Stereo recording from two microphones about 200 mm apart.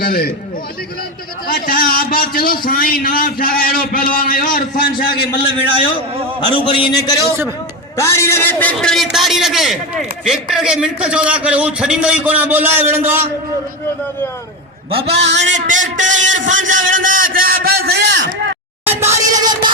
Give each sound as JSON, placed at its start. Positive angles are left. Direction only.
{"t": 0.0, "sound": "a man's voice", "side_deg": 50}
{"t": 1.5, "sound": "a man's voice", "side_deg": 45}
{"t": 6.5, "sound": "a man's voice", "side_deg": 25}
{"t": 14.8, "sound": "a man's voice", "side_deg": -30}
{"t": 15.3, "sound": "speech", "side_deg": -60}
{"t": 15.5, "sound": "a man's voice", "side_deg": -40}
{"t": 16.2, "sound": "a sound", "side_deg": -40}
{"t": 18.9, "sound": "music", "side_deg": -10}